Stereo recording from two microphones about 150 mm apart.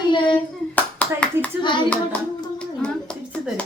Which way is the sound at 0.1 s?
35° left (ahead or behind).